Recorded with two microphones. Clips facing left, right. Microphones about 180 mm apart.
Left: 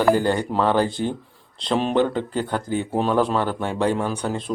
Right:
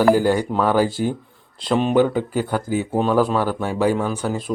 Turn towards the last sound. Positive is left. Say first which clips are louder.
# right 2 dB
turn(degrees=-5)  # may be behind; listen again after turning